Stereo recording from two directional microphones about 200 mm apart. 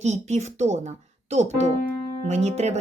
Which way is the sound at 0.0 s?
35° right (ahead or behind).